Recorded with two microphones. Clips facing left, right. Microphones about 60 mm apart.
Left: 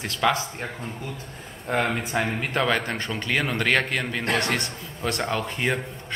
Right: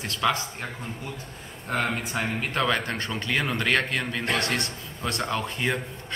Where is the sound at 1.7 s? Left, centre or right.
Left.